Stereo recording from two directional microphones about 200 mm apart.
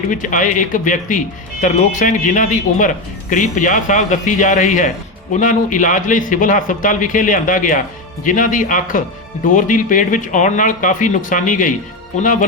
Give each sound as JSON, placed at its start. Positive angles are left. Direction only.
{"t": 0.1, "sound": "speech", "side_deg": 40}